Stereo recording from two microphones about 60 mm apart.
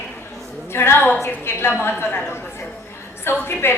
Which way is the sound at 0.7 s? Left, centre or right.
Left.